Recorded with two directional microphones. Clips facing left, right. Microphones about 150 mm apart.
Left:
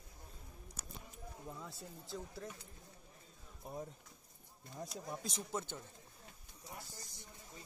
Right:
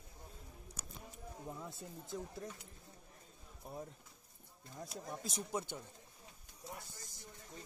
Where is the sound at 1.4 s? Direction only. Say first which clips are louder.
Right 2 dB; 20° right (ahead or behind).